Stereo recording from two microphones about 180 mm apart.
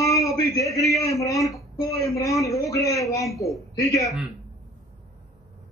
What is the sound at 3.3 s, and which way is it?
Speech, centre (ahead or behind).